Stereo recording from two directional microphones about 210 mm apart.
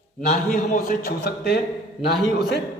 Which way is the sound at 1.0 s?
50° left (ahead or behind).